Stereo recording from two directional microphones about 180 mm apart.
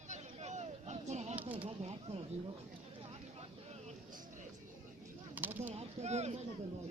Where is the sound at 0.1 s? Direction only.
40° right (ahead or behind).